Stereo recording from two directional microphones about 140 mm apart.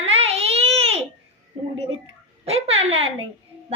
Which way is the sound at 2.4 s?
45° right (ahead or behind).